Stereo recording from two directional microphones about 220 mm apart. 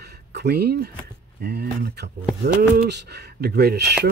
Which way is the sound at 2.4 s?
50° right (ahead or behind).